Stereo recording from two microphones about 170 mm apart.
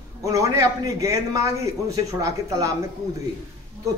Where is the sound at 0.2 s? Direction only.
20° right (ahead or behind).